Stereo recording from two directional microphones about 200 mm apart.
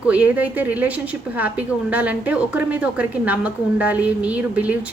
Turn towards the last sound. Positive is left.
turn(degrees=-5)  # may be behind; listen again after turning